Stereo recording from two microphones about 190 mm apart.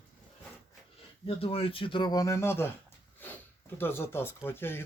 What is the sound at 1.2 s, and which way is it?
Speech, 30° left (ahead or behind).